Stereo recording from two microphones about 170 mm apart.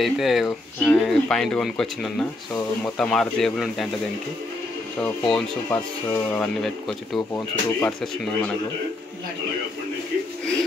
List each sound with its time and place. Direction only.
0.0 s speech: centre (ahead or behind)
5.0 s speech: 10° left (ahead or behind)